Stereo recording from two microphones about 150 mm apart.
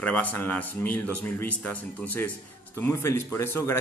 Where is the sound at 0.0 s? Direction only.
10° left (ahead or behind).